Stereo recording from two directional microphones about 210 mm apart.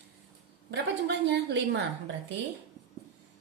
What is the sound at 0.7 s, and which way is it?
A woman's voice, 55° right (ahead or behind).